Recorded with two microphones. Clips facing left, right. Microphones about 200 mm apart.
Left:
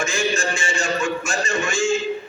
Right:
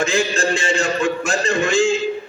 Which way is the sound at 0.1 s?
60° right (ahead or behind).